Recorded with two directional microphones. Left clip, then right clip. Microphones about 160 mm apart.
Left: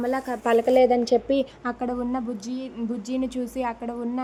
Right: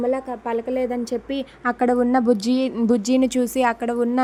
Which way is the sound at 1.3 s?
5° right (ahead or behind).